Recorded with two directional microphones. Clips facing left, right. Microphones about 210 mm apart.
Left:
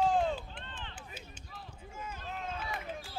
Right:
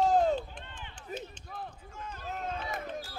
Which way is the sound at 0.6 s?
10° right (ahead or behind).